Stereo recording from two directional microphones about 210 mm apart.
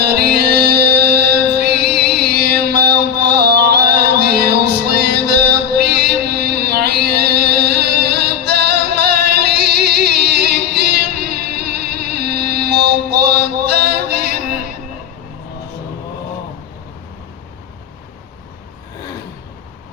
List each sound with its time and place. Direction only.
0.1 s music: 50° right (ahead or behind)